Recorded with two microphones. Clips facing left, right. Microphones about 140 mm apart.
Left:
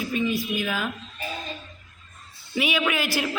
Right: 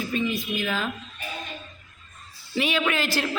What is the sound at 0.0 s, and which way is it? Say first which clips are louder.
Speech: left 1 dB; 10° left (ahead or behind).